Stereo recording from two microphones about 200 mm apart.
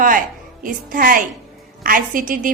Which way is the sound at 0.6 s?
45° right (ahead or behind).